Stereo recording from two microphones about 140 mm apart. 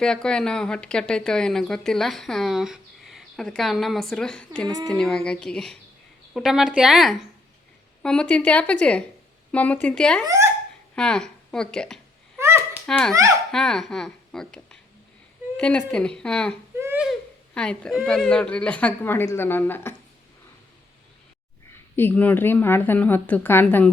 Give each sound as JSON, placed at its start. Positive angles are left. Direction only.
{"t": 0.0, "sound": "a woman's voice", "side_deg": 5}
{"t": 10.2, "sound": "speech", "side_deg": -20}
{"t": 10.9, "sound": "speech", "side_deg": 5}
{"t": 12.4, "sound": "a sound", "side_deg": -20}
{"t": 12.8, "sound": "a woman's voice", "side_deg": 5}
{"t": 16.7, "sound": "baby cry", "side_deg": -15}
{"t": 17.0, "sound": "speech", "side_deg": 5}
{"t": 21.9, "sound": "a woman's voice", "side_deg": 15}